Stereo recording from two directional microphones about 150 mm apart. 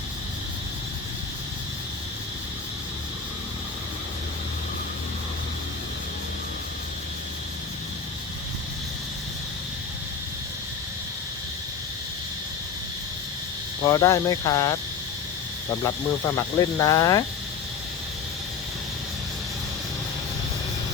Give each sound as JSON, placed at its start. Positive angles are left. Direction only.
{"t": 13.8, "sound": "speech", "side_deg": 20}
{"t": 15.8, "sound": "speech", "side_deg": 20}